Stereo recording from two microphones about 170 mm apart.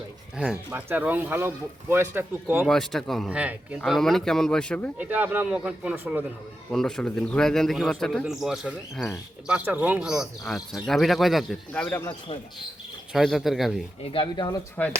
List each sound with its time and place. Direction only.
0.3 s speech: 5° right (ahead or behind)
2.6 s a man's voice: centre (ahead or behind)
4.9 s a man's voice: 10° right (ahead or behind); by 12.0 s 10° left (ahead or behind)
13.1 s a man's voice: centre (ahead or behind)
14.0 s speech: 30° left (ahead or behind)